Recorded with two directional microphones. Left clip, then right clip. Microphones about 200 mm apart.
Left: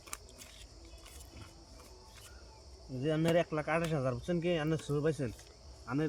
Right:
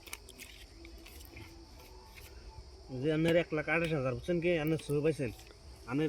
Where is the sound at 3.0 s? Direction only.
15° left (ahead or behind).